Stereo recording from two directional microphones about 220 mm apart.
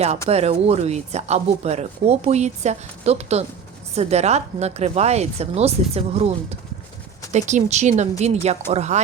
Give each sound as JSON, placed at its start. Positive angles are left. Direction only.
{"t": 0.3, "sound": "speech", "side_deg": -30}